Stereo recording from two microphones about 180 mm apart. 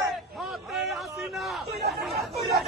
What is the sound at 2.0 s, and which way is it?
Chatter, centre (ahead or behind).